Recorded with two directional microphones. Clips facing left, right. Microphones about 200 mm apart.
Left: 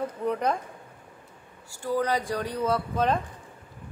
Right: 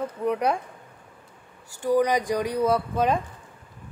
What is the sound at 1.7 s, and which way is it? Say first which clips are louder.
Speech: right 5 dB; 15° right (ahead or behind).